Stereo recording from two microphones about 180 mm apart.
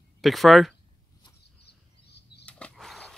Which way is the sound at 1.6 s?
65° left (ahead or behind).